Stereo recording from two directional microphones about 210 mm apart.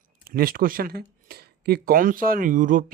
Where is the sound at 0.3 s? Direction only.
45° right (ahead or behind).